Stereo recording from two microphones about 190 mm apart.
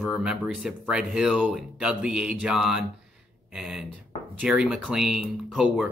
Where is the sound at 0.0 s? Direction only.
5° right (ahead or behind).